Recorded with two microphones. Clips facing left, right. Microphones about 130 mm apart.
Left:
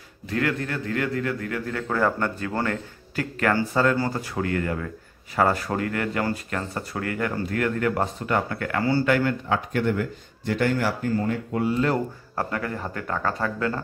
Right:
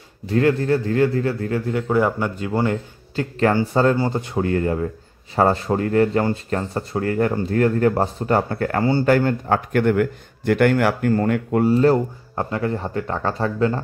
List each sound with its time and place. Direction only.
0.3 s a man's voice: 30° right (ahead or behind)
9.7 s a man's voice: 60° right (ahead or behind)
11.6 s a man's voice: 35° right (ahead or behind)